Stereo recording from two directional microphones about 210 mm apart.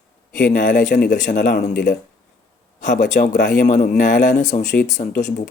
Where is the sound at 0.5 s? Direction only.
40° left (ahead or behind).